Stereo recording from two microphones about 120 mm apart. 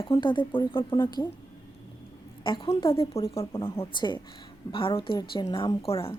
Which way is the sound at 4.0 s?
40° left (ahead or behind).